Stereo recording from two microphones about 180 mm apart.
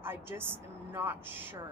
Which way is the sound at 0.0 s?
10° right (ahead or behind).